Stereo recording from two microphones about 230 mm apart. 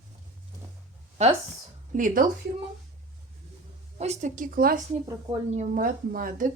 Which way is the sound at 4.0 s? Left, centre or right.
Right.